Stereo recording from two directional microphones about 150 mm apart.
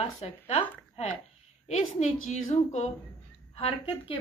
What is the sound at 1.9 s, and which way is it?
Speech, 50° left (ahead or behind).